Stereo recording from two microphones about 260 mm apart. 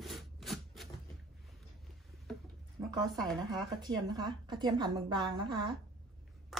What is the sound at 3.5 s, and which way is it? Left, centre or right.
A woman's voice, centre.